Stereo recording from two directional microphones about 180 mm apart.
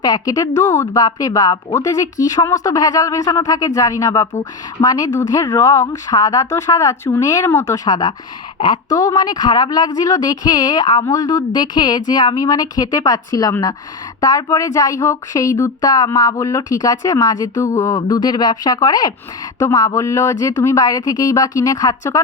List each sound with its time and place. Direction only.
0.0 s speech: 20° left (ahead or behind)